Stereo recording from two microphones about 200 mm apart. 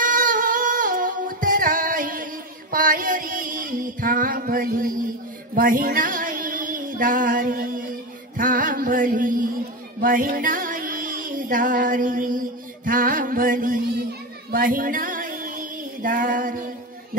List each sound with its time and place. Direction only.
0.0 s music: 45° right (ahead or behind)
2.7 s a sound: 45° right (ahead or behind)
5.5 s female singing: 45° right (ahead or behind)
8.4 s music: 45° right (ahead or behind)
14.5 s female singing: 45° right (ahead or behind)